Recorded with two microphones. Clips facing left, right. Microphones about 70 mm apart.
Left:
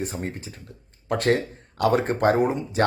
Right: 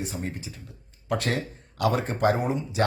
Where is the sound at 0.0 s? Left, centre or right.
Left.